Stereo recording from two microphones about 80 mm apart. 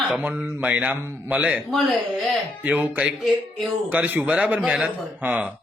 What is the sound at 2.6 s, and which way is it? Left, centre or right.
A man's voice, centre.